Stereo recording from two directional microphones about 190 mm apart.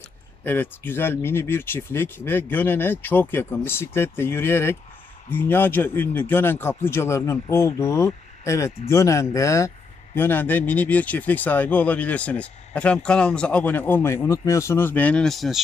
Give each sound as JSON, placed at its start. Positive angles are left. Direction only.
{"t": 0.4, "sound": "speech", "side_deg": 10}